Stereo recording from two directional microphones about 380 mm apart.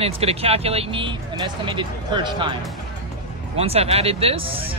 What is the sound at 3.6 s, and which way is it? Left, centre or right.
Speech, centre.